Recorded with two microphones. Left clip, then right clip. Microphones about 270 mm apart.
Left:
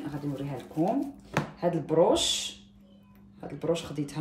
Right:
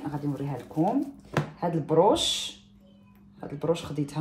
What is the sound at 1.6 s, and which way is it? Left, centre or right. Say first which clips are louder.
Speech: right 2 dB; centre.